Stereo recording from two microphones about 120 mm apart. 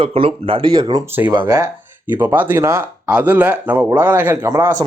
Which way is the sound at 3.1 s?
10° right (ahead or behind).